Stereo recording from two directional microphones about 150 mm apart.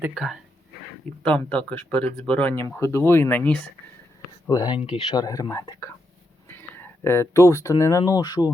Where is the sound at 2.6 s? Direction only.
20° left (ahead or behind).